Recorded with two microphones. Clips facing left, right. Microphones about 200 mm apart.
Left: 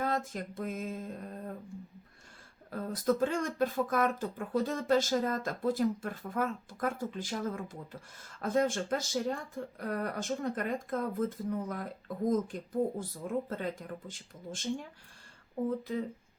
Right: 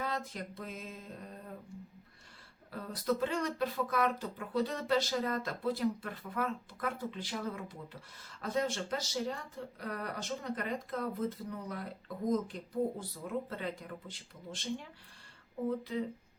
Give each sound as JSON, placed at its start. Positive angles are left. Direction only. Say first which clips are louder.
{"t": 0.0, "sound": "speech", "louder": "left 5 dB", "side_deg": 50}
{"t": 2.6, "sound": "speech", "louder": "left 4 dB", "side_deg": 45}